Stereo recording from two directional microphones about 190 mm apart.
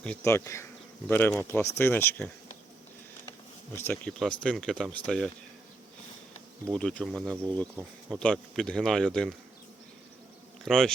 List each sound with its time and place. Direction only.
0.0 s speech: 10° left (ahead or behind)
3.8 s speech: 10° left (ahead or behind)
6.7 s speech: centre (ahead or behind)
10.6 s speech: 5° left (ahead or behind)